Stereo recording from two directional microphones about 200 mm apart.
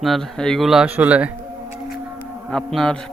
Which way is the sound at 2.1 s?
5° left (ahead or behind).